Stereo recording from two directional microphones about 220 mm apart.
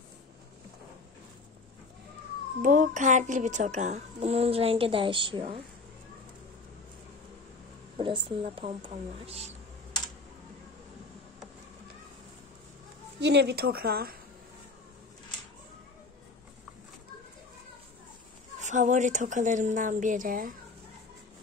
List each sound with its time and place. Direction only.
2.6 s a child's voice: 35° right (ahead or behind)
8.0 s speech: 25° right (ahead or behind)
13.2 s speech: 50° right (ahead or behind)
18.6 s a child's voice: 35° right (ahead or behind)